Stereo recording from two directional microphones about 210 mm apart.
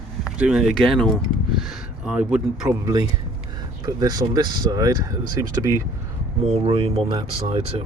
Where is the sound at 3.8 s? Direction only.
15° right (ahead or behind).